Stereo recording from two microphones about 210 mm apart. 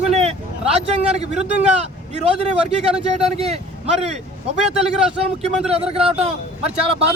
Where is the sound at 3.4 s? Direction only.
30° right (ahead or behind).